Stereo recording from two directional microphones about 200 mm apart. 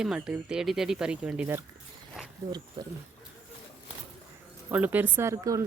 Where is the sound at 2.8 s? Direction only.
25° right (ahead or behind).